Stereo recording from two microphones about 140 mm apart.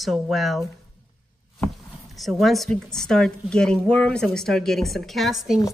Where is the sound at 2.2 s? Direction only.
Centre (ahead or behind).